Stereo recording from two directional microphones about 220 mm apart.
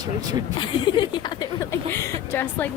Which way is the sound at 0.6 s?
20° left (ahead or behind).